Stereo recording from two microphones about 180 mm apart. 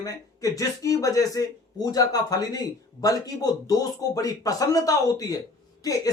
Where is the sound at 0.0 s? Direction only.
20° left (ahead or behind).